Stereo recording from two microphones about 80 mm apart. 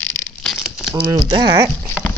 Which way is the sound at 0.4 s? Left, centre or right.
Centre.